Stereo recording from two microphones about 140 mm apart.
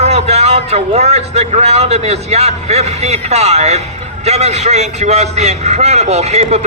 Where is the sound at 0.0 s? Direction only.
50° right (ahead or behind).